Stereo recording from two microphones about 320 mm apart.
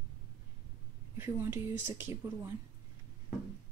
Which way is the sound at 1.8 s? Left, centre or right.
Centre.